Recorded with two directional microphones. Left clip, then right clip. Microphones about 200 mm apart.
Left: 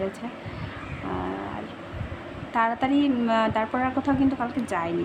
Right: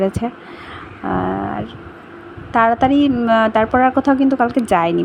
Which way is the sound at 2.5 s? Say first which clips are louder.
Right 10 dB; 30° right (ahead or behind).